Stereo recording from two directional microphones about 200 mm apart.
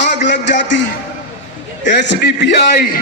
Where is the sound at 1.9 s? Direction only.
60° left (ahead or behind).